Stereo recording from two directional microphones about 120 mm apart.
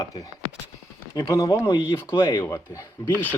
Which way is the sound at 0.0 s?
30° left (ahead or behind).